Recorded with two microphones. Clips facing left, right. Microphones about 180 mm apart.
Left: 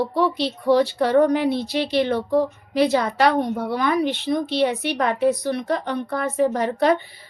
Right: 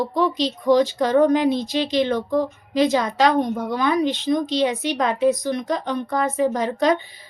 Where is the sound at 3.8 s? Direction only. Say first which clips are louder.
Right 2 dB; 20° right (ahead or behind).